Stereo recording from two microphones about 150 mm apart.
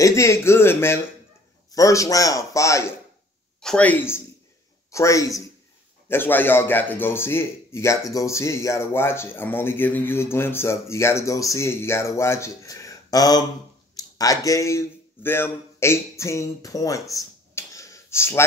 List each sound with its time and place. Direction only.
0.0 s a man's voice: 20° left (ahead or behind)
3.6 s a man's voice: 10° left (ahead or behind)
17.1 s a sound: 20° left (ahead or behind)